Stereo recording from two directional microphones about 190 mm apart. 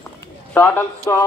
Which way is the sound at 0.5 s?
10° left (ahead or behind).